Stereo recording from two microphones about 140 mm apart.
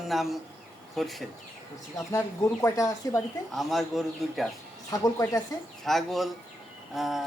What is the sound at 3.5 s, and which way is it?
Speech, centre (ahead or behind).